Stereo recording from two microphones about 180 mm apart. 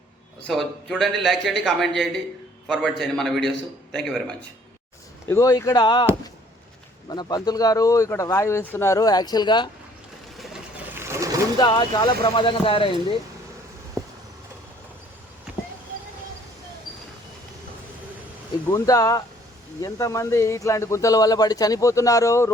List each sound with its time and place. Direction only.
0.4 s a man's voice: centre (ahead or behind)
5.3 s speech: 20° left (ahead or behind)
7.1 s speech: 25° left (ahead or behind)
10.3 s a sound: centre (ahead or behind)
10.9 s sewing machine: 15° right (ahead or behind)
11.6 s speech: 25° left (ahead or behind)
18.7 s a man's voice: 20° left (ahead or behind)